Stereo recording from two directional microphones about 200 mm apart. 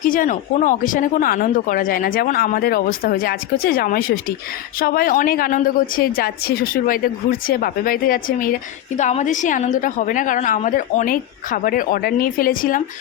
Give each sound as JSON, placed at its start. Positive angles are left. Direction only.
{"t": 0.0, "sound": "a woman's voice", "side_deg": 40}